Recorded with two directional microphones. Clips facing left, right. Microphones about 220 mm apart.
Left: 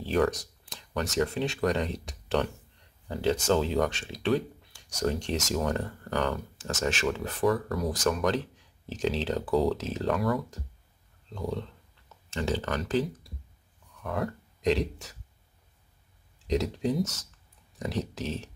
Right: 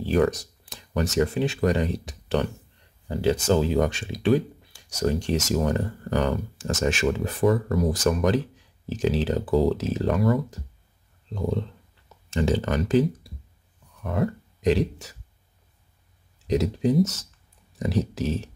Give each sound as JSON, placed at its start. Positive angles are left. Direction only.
{"t": 0.0, "sound": "speech", "side_deg": -5}
{"t": 7.4, "sound": "speech", "side_deg": -25}
{"t": 7.9, "sound": "speech", "side_deg": -5}
{"t": 11.3, "sound": "speech", "side_deg": -20}
{"t": 14.1, "sound": "speech", "side_deg": 0}
{"t": 16.4, "sound": "speech", "side_deg": -5}